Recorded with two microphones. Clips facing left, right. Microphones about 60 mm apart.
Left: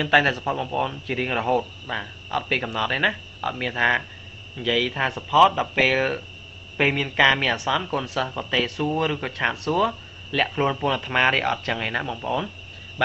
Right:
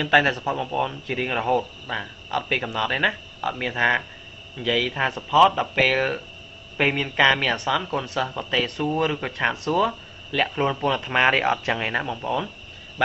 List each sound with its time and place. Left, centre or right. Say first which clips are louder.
0.0 s speech: even; centre
11.3 s speech: right 2 dB; centre
12.0 s speech: even; centre